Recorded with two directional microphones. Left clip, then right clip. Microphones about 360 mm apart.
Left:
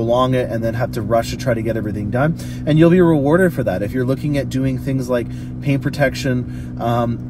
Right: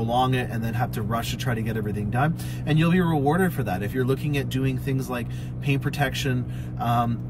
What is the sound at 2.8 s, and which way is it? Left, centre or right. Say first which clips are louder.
Speech: left 11 dB; right.